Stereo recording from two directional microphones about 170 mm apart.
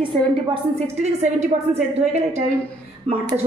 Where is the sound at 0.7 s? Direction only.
40° right (ahead or behind).